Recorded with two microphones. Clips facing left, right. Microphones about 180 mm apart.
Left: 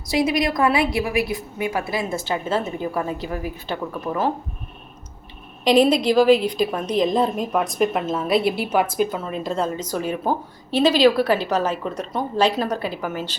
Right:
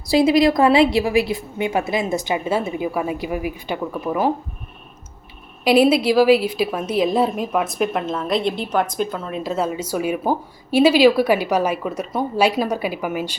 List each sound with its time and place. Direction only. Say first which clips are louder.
0.1 s a woman's voice: right 6 dB; 30° right (ahead or behind); by 4.3 s 10° right (ahead or behind)
5.6 s a woman's voice: right 1 dB; 5° right (ahead or behind)